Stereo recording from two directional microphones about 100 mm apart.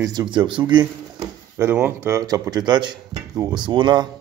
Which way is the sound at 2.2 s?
40° right (ahead or behind).